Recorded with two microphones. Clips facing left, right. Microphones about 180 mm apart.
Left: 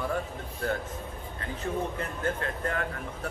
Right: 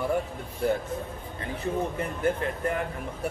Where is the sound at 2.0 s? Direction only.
15° right (ahead or behind).